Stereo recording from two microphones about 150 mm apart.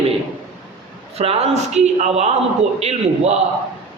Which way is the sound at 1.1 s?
40° right (ahead or behind).